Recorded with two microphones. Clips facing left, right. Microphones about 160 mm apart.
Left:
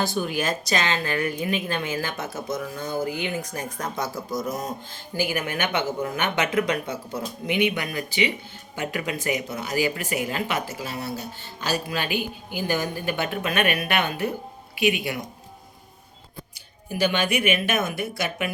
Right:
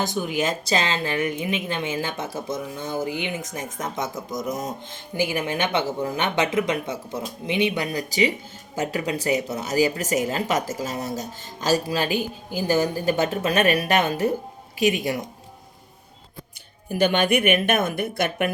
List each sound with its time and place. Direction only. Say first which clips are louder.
0.0 s speech: right 1 dB; 15° right (ahead or behind); by 15.2 s 40° right (ahead or behind)
16.9 s speech: right 4 dB; 50° right (ahead or behind)